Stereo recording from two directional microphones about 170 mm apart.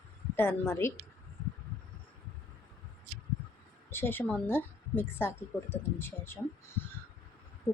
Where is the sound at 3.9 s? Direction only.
15° left (ahead or behind).